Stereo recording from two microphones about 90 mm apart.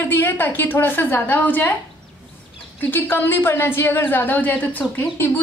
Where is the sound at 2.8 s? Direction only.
20° left (ahead or behind).